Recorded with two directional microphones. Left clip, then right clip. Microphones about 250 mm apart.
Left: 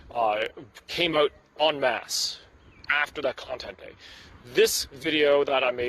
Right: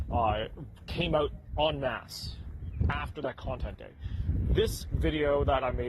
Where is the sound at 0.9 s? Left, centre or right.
Left.